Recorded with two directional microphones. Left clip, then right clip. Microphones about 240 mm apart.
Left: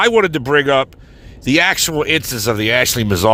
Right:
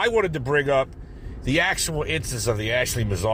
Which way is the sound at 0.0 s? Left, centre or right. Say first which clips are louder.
Left 9 dB; left.